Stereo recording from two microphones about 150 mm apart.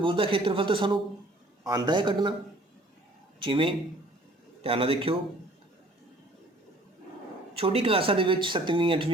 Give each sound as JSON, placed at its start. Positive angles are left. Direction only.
{"t": 0.0, "sound": "speech", "side_deg": -35}
{"t": 3.4, "sound": "speech", "side_deg": -35}
{"t": 7.5, "sound": "speech", "side_deg": -40}